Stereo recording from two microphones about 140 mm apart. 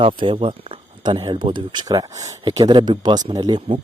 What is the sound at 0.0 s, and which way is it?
Speech, 40° right (ahead or behind).